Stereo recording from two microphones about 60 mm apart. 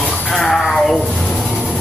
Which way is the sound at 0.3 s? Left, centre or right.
Centre.